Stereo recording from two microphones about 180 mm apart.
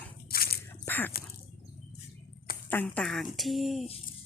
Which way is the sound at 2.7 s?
10° left (ahead or behind).